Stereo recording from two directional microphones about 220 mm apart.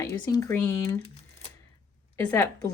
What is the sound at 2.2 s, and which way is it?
Speech, 15° left (ahead or behind).